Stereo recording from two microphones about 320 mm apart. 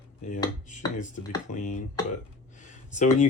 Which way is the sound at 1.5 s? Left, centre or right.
Left.